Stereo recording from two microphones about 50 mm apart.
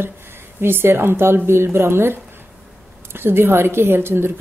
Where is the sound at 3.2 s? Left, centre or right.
Right.